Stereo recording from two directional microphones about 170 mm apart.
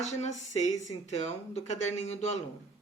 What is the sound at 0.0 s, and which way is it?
Speech, 40° left (ahead or behind).